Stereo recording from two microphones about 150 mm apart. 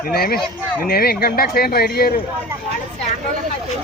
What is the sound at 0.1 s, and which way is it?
Speech, 90° left.